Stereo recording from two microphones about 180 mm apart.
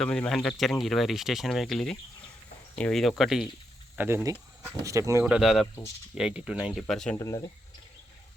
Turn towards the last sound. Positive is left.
turn(degrees=20)  # may be behind; listen again after turning